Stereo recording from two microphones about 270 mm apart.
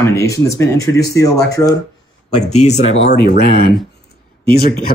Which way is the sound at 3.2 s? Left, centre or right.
Left.